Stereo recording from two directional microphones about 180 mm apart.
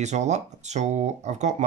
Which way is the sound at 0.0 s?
40° right (ahead or behind).